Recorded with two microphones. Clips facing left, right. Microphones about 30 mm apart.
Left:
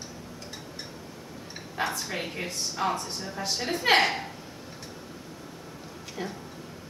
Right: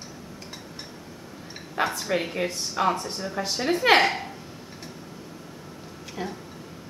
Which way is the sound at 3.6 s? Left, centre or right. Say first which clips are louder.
Right 4 dB; centre.